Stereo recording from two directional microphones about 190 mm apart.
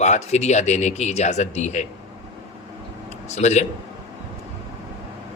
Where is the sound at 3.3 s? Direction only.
35° left (ahead or behind).